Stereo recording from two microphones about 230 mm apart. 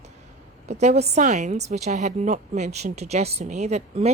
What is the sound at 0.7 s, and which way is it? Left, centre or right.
A woman's voice, right.